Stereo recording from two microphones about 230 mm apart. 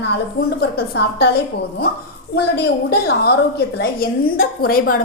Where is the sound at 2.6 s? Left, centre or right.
Left.